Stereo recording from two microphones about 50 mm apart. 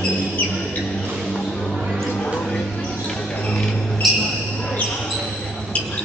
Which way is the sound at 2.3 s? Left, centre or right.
Centre.